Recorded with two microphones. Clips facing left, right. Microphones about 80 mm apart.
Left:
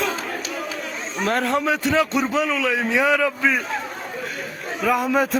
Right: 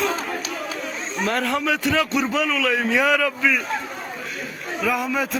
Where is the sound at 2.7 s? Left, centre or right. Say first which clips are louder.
Right 1 dB; centre.